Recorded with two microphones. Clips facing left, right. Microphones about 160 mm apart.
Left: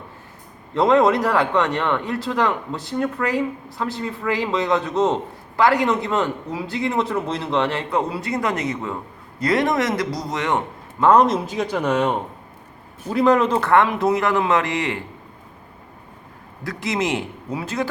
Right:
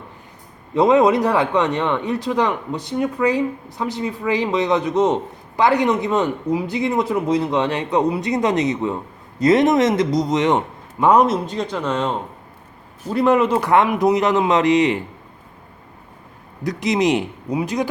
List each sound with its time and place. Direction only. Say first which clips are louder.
1.2 s speech: right 2 dB; 20° right (ahead or behind)
11.0 s speech: even; 10° right (ahead or behind)
11.4 s speech: left 1 dB; 5° left (ahead or behind)
13.1 s speech: right 1 dB; 5° right (ahead or behind); by 15.0 s 20° right (ahead or behind)
16.6 s speech: right 5 dB; 20° right (ahead or behind)